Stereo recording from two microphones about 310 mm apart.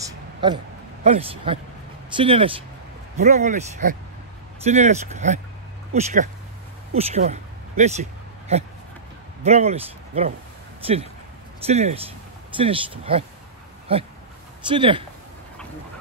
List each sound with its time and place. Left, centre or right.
0.0 s a sound: centre
1.0 s speech: centre
11.6 s speech: centre